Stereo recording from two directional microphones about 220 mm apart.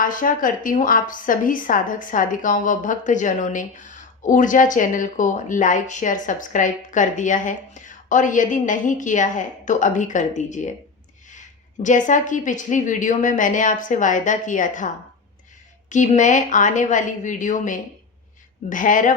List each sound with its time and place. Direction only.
0.0 s a woman's voice: 40° left (ahead or behind)
15.9 s a woman's voice: 35° left (ahead or behind)